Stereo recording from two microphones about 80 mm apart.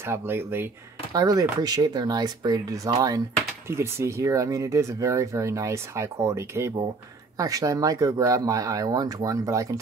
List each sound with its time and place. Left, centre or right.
0.0 s speech: right
1.1 s speech: right
3.6 s speech: right
7.3 s speech: right